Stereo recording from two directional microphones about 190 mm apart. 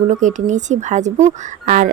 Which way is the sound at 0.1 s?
40° right (ahead or behind).